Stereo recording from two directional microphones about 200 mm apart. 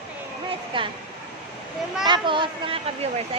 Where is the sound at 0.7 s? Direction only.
25° right (ahead or behind).